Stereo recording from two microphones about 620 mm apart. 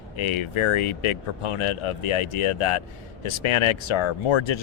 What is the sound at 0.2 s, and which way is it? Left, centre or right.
Speech, left.